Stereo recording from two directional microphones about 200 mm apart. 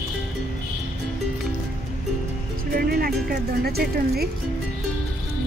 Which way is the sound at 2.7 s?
50° right (ahead or behind).